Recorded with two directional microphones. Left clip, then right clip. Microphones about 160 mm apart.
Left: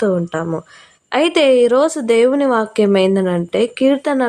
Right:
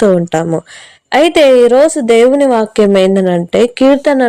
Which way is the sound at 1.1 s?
25° right (ahead or behind).